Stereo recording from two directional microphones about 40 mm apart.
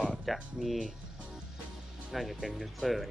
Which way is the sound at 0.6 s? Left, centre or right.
Centre.